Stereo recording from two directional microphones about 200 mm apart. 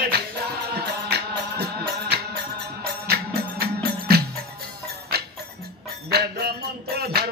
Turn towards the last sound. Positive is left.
turn(degrees=-50)  # may be behind; listen again after turning